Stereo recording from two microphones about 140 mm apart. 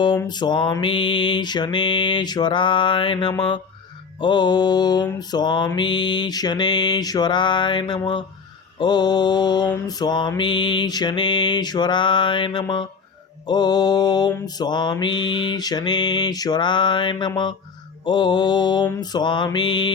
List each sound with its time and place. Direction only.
0.3 s mantra: 30° left (ahead or behind)